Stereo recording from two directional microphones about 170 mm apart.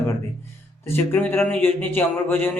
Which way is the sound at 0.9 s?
10° left (ahead or behind).